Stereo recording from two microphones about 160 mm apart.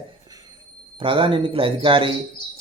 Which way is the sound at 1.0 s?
35° right (ahead or behind).